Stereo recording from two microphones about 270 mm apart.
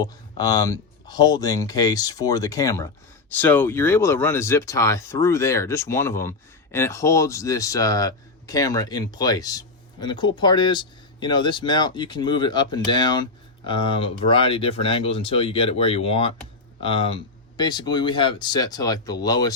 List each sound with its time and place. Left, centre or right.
0.0 s speech: centre